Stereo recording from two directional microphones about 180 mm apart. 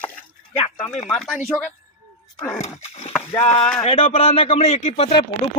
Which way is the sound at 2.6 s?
40° left (ahead or behind).